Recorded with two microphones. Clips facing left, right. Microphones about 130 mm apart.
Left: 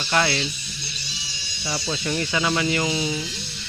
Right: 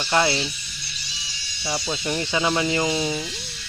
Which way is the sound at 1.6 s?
15° right (ahead or behind).